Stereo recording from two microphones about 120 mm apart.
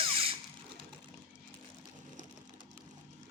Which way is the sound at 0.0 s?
50° right (ahead or behind).